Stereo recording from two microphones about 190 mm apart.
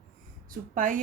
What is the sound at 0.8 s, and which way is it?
Speech, 45° right (ahead or behind).